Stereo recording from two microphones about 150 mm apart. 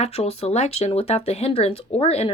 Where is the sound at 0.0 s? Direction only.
45° left (ahead or behind).